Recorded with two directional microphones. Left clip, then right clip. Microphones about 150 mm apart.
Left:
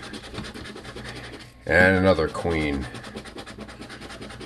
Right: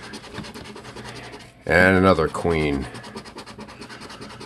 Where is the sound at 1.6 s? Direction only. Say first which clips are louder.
Right 2 dB; 40° right (ahead or behind).